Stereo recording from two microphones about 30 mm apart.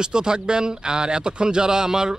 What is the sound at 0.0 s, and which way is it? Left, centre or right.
Speech, right.